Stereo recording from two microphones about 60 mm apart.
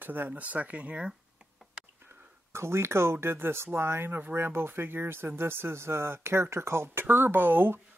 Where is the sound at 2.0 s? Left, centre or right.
Right.